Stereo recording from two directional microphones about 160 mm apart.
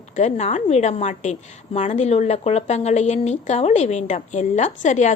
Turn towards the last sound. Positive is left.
turn(degrees=50)  # may be behind; listen again after turning